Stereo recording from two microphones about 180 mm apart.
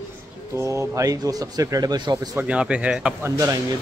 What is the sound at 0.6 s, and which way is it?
Speech, 15° right (ahead or behind).